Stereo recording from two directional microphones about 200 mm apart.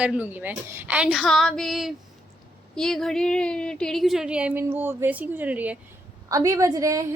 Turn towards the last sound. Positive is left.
turn(degrees=-15)  # may be behind; listen again after turning